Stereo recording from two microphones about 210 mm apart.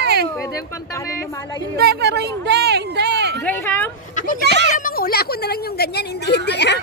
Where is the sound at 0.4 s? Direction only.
15° left (ahead or behind).